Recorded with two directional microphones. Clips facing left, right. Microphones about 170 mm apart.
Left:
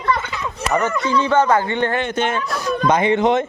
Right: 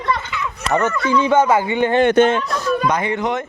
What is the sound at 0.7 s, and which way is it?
Speech, 15° left (ahead or behind).